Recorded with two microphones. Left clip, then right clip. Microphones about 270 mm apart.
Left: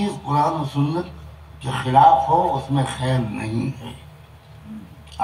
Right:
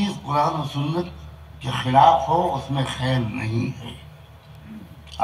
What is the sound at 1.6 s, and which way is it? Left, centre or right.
A woman's voice, right.